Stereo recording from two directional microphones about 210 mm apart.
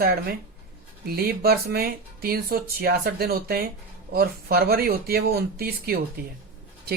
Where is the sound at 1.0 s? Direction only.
45° right (ahead or behind).